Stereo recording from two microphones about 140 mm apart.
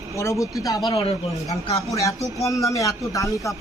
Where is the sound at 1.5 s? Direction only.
25° left (ahead or behind).